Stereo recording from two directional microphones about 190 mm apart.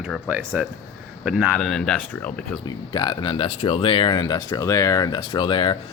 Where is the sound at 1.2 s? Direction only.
5° right (ahead or behind).